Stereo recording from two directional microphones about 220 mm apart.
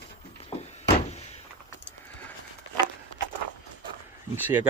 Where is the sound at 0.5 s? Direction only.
25° left (ahead or behind).